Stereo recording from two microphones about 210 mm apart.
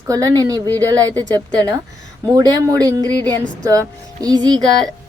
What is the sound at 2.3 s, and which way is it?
Speech, 20° right (ahead or behind).